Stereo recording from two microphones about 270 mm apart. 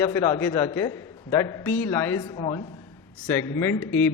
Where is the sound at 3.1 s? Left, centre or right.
Centre.